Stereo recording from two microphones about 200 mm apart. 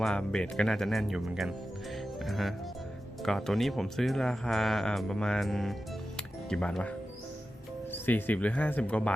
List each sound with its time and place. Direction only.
0.0 s speech: 5° left (ahead or behind)
7.9 s speech: 10° left (ahead or behind)